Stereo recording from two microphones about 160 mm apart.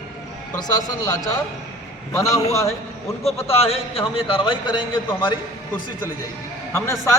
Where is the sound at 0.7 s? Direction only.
25° left (ahead or behind).